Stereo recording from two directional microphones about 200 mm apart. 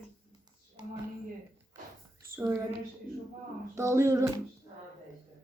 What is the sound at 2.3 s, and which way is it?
Speech, 10° right (ahead or behind).